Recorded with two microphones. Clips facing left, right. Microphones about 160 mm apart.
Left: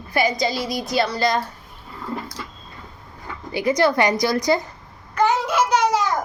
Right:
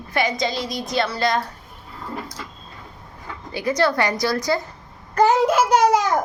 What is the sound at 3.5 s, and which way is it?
A child's voice, 15° left (ahead or behind).